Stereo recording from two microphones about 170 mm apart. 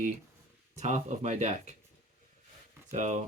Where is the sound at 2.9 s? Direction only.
45° right (ahead or behind).